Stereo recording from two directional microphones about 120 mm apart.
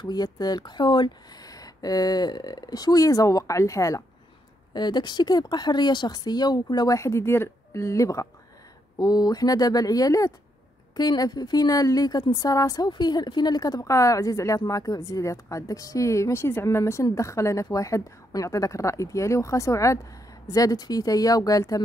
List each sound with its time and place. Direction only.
0.0 s speech: 35° left (ahead or behind)
4.7 s a woman's voice: 35° left (ahead or behind)